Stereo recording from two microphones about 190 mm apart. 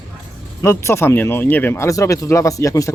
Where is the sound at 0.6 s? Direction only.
15° left (ahead or behind).